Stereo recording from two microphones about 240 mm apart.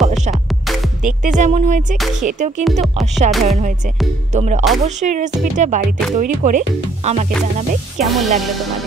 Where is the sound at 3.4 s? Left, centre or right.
Right.